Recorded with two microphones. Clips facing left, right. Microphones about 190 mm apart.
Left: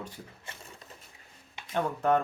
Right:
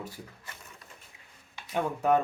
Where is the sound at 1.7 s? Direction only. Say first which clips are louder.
Right 1 dB; 10° right (ahead or behind).